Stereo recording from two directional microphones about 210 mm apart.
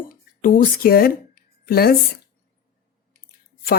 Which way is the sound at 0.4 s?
40° left (ahead or behind).